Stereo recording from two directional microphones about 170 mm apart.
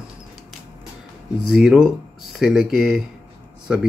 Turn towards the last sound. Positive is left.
turn(degrees=-5)  # may be behind; listen again after turning